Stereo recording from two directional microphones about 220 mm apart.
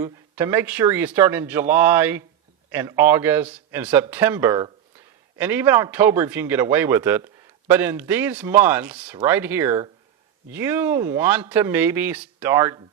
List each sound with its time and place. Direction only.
0.0 s a man's voice: 10° right (ahead or behind)